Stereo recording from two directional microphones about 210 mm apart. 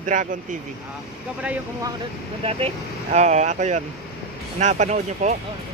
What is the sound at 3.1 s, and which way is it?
Speech, 35° right (ahead or behind).